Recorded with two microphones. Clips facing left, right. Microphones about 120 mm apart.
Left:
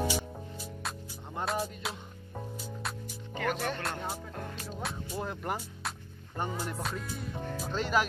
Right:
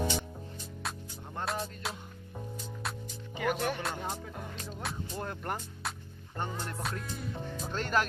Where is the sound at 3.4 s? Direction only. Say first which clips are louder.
Right 1 dB; 10° right (ahead or behind).